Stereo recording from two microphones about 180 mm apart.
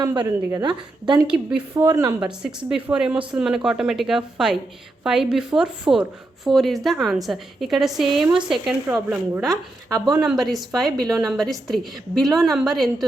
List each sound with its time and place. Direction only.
0.0 s a woman's voice: 20° right (ahead or behind)
1.2 s a woman's voice: 5° right (ahead or behind)
1.9 s a woman's voice: 20° right (ahead or behind)
2.2 s a woman's voice: 5° right (ahead or behind)